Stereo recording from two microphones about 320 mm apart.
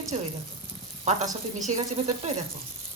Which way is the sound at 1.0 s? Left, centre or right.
Right.